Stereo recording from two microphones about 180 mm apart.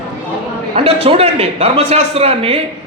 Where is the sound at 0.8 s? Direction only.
35° right (ahead or behind).